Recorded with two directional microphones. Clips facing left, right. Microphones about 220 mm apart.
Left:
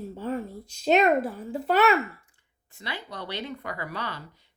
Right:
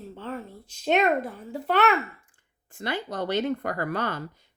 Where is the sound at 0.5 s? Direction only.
35° left (ahead or behind).